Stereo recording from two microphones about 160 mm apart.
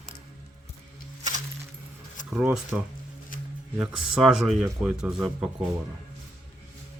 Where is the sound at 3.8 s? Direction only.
5° right (ahead or behind).